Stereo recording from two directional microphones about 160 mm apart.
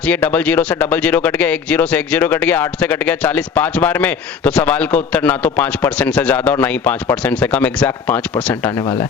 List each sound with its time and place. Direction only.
0.1 s speech: 10° left (ahead or behind)